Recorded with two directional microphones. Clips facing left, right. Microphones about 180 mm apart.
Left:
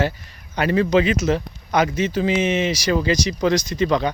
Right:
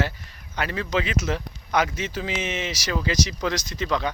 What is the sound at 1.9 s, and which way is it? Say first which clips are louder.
Speech: left 9 dB; 5° right (ahead or behind).